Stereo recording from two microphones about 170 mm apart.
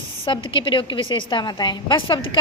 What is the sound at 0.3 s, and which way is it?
A woman's voice, 30° left (ahead or behind).